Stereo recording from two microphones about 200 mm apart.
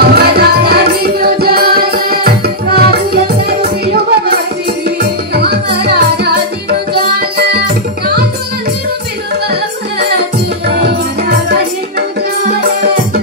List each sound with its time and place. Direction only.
0.1 s music: 50° right (ahead or behind)
9.5 s music: 55° right (ahead or behind)